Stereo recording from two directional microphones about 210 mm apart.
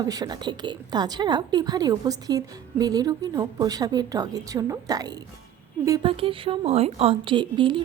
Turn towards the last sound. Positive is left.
turn(degrees=-25)  # may be behind; listen again after turning